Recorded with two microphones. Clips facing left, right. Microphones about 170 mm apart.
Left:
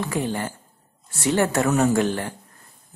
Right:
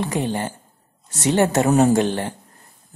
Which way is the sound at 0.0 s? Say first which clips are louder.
Right 2 dB; 20° right (ahead or behind).